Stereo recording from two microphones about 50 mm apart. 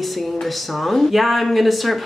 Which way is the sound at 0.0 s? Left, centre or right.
Centre.